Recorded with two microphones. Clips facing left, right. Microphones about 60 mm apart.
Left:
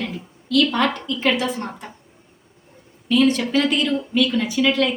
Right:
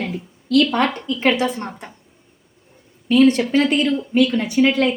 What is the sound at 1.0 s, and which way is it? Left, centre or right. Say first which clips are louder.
Speech: right 2 dB; right.